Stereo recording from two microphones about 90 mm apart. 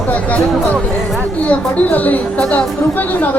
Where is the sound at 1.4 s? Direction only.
15° left (ahead or behind).